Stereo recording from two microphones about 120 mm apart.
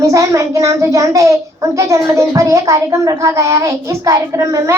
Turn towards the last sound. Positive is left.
turn(degrees=-25)  # may be behind; listen again after turning